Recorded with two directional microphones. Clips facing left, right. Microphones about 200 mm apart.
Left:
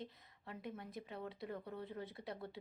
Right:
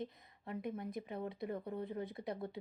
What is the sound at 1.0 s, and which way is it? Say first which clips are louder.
Speech: right 5 dB; 15° right (ahead or behind).